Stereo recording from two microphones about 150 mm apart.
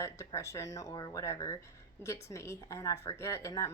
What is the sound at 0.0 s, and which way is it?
A woman's voice, 20° left (ahead or behind).